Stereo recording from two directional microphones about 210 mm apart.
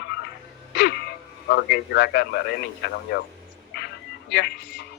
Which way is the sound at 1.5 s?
55° left (ahead or behind).